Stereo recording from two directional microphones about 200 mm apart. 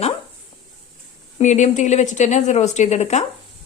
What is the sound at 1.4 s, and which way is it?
A woman's voice, 35° left (ahead or behind).